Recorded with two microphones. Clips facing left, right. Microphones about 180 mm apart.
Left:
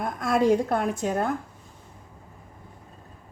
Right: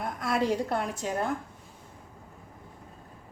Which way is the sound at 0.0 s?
50° left (ahead or behind).